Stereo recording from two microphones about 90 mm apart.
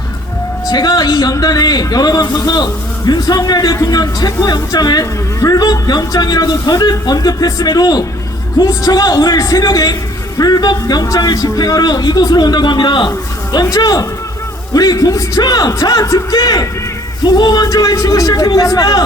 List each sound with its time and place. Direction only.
0.7 s speech: 50° left (ahead or behind)
13.1 s a man's voice: 45° left (ahead or behind)